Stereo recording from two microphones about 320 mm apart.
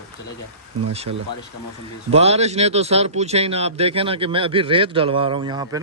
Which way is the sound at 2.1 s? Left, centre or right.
Centre.